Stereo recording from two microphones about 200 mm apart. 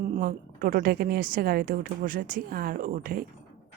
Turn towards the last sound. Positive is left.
turn(degrees=-45)  # may be behind; listen again after turning